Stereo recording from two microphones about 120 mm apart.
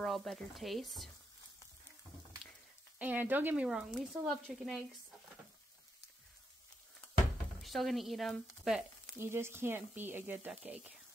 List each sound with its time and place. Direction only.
0.0 s speech: centre (ahead or behind)
3.0 s speech: 15° right (ahead or behind)
7.6 s speech: centre (ahead or behind)
9.2 s speech: 20° right (ahead or behind)